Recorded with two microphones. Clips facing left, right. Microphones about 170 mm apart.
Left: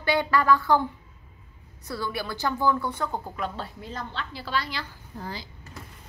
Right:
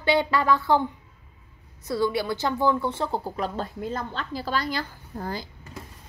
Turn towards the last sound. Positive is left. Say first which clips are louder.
# right 5 dB
turn(degrees=-45)  # may be behind; listen again after turning